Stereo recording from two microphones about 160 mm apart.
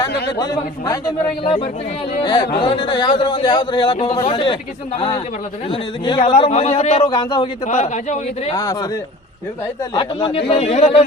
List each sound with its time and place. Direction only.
0.3 s a man's voice: 25° left (ahead or behind)
7.7 s a man's voice: 45° left (ahead or behind)
8.5 s a man's voice: 25° left (ahead or behind)
10.0 s a man's voice: 35° left (ahead or behind)